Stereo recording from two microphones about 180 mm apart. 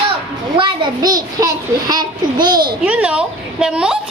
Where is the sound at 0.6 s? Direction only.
25° right (ahead or behind).